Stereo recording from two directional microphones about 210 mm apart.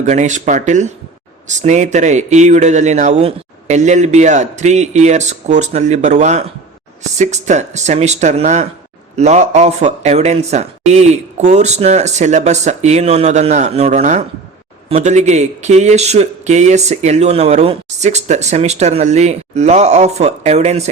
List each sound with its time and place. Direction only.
0.0 s speech: 35° right (ahead or behind)